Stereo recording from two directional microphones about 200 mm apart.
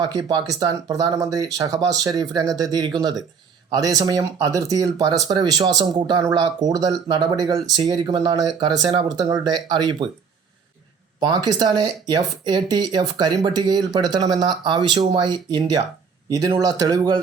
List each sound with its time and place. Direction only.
0.0 s speech: 20° right (ahead or behind)
11.2 s speech: 20° right (ahead or behind)